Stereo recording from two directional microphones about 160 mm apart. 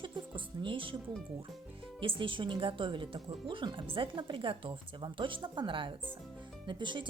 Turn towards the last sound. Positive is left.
turn(degrees=-30)  # may be behind; listen again after turning